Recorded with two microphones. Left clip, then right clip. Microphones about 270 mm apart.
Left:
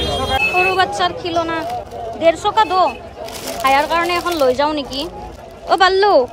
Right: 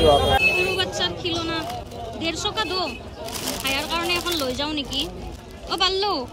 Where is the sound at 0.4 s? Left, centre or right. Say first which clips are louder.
Left 6 dB; centre.